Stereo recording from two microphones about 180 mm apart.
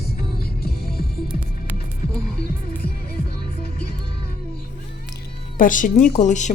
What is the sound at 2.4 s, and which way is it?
Music, 60° left (ahead or behind).